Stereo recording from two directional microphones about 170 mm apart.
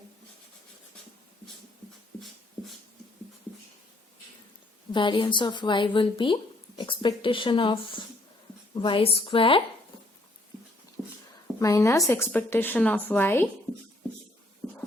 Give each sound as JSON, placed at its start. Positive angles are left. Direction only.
{"t": 4.9, "sound": "a woman's voice", "side_deg": 30}
{"t": 11.6, "sound": "a woman's voice", "side_deg": 20}